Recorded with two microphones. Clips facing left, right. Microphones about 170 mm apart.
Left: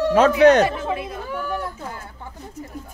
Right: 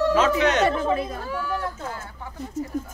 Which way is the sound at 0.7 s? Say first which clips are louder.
Right 3 dB; 40° right (ahead or behind).